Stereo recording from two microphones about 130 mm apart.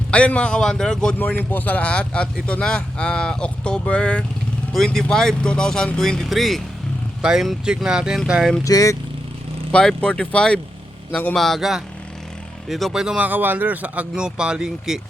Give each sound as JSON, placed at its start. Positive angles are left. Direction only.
{"t": 0.1, "sound": "a man's voice", "side_deg": 10}
{"t": 8.6, "sound": "speech", "side_deg": 25}
{"t": 9.7, "sound": "a man's voice", "side_deg": 5}
{"t": 11.3, "sound": "speech", "side_deg": 0}